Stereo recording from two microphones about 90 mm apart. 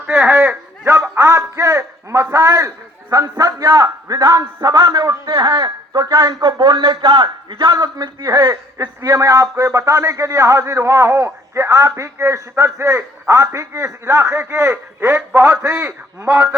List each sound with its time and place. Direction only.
0.1 s a man's voice: 25° right (ahead or behind); by 5.3 s 45° right (ahead or behind)
5.3 s a man's voice: 55° right (ahead or behind)
9.0 s a man's voice: 40° right (ahead or behind)